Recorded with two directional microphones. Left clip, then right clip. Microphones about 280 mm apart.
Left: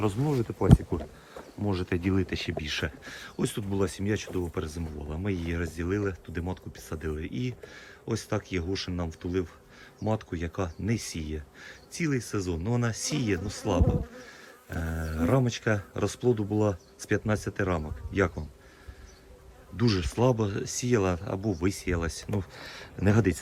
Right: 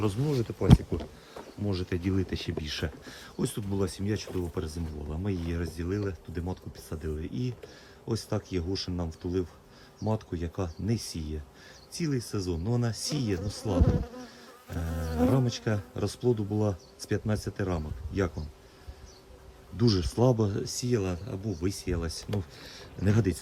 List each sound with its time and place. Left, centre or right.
0.0 s speech: centre
14.8 s speech: centre
19.7 s speech: centre